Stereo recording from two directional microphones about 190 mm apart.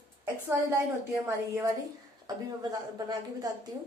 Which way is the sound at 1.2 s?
15° right (ahead or behind).